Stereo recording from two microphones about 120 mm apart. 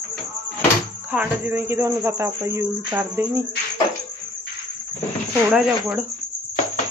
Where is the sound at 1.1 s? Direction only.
15° right (ahead or behind).